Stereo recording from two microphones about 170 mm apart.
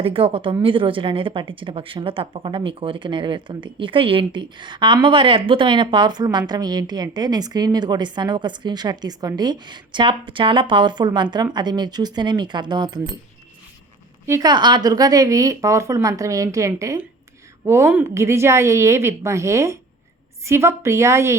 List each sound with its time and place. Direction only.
0.0 s a woman's voice: 30° right (ahead or behind)
14.3 s a woman's voice: 20° right (ahead or behind)